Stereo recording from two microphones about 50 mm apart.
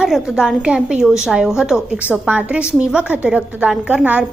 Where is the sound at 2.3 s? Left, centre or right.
Right.